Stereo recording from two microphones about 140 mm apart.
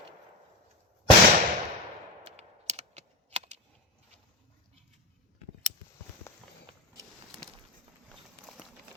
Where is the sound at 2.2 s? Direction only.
50° right (ahead or behind).